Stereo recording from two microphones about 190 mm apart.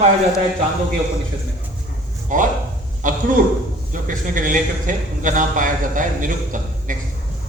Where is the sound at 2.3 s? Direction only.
45° right (ahead or behind).